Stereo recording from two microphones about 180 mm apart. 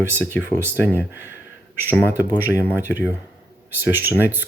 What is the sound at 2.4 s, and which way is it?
Speech, 10° right (ahead or behind).